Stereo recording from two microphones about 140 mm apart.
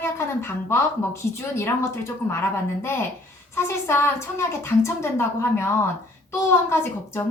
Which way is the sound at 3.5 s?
20° left (ahead or behind).